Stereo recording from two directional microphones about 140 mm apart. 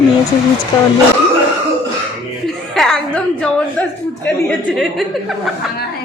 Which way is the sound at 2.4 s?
5° left (ahead or behind).